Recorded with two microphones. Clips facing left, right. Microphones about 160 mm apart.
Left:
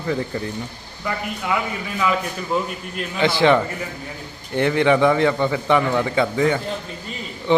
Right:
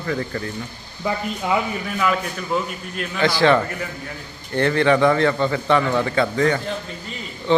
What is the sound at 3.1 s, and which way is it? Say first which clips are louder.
A man's voice: even; 20° left (ahead or behind).